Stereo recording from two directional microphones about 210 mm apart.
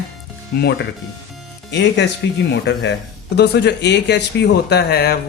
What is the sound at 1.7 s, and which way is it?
Speech, 55° left (ahead or behind).